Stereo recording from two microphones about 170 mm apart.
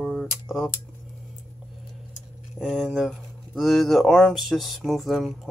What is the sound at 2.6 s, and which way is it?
Speech, centre (ahead or behind).